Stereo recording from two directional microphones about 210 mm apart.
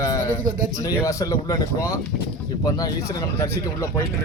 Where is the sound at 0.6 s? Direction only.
40° right (ahead or behind).